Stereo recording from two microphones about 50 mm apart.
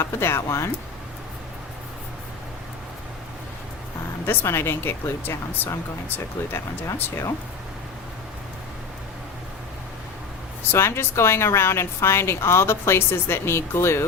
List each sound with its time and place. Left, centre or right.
0.0 s speech: left
4.3 s speech: left
6.8 s speech: left
10.6 s speech: left